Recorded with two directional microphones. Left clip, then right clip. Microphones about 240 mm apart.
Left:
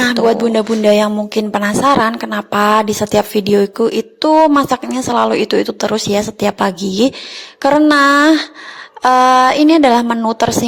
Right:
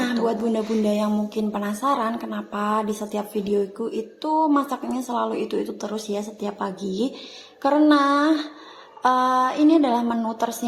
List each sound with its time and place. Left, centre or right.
0.0 s speech: left